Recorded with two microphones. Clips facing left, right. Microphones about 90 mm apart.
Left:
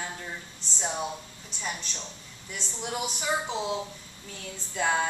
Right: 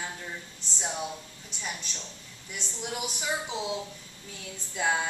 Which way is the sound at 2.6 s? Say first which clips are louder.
Left 1 dB; 10° right (ahead or behind).